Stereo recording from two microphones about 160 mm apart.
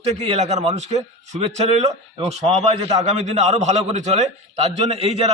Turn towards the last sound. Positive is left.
turn(degrees=-40)  # may be behind; listen again after turning